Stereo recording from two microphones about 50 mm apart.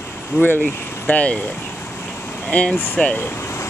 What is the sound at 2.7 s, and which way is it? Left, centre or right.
Speech, left.